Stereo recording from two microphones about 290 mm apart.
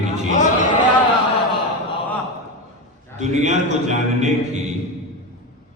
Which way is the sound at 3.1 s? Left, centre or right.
Right.